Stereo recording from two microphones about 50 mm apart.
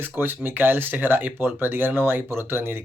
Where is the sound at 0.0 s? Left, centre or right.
Right.